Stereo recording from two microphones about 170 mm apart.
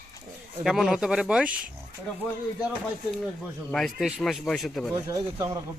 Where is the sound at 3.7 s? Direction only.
5° left (ahead or behind).